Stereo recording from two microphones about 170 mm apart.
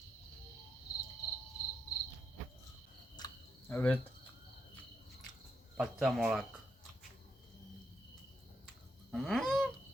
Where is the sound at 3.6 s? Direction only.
10° left (ahead or behind).